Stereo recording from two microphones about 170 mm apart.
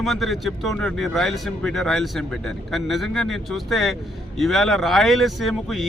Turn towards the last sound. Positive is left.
turn(degrees=0)  # may be behind; listen again after turning